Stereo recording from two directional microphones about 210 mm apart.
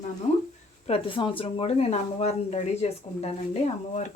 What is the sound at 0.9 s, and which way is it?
Speech, 25° left (ahead or behind).